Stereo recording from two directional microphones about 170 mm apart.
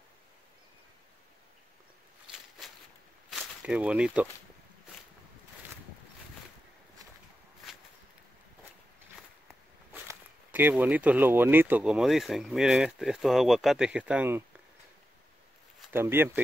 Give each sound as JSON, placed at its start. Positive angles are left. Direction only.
{"t": 3.3, "sound": "a sound", "side_deg": 0}
{"t": 10.0, "sound": "speech", "side_deg": -10}
{"t": 15.9, "sound": "speech", "side_deg": -15}